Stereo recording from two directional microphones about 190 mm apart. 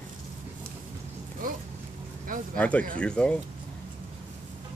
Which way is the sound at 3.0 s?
5° left (ahead or behind).